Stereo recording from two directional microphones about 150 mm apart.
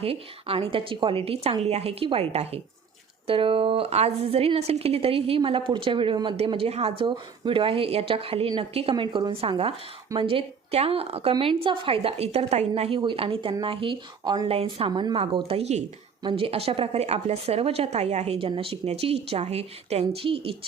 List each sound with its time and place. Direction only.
0.0 s a woman's voice: 40° right (ahead or behind)
14.5 s a woman's voice: 40° right (ahead or behind)
15.5 s a woman's voice: 45° right (ahead or behind)